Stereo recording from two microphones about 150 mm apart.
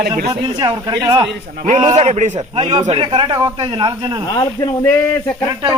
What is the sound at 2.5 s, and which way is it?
A man's voice, 35° right (ahead or behind).